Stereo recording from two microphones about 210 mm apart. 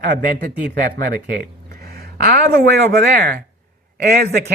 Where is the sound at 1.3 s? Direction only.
45° right (ahead or behind).